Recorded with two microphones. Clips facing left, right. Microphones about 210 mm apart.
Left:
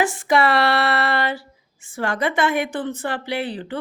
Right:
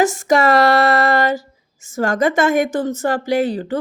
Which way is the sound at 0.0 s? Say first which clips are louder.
Right 4 dB; 45° right (ahead or behind).